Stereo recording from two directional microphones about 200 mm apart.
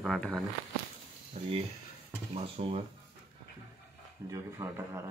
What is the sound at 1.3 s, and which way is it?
Speech, 30° right (ahead or behind).